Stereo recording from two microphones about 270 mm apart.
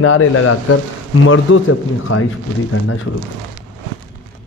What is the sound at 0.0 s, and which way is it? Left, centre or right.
A man's voice, left.